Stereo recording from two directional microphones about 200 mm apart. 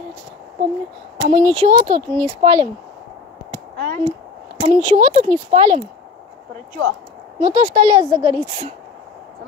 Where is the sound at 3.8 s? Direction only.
40° right (ahead or behind).